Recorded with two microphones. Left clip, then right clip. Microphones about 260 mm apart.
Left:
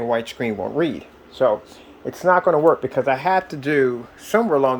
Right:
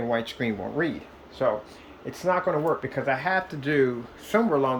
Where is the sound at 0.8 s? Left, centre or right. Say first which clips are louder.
Left 6 dB; left.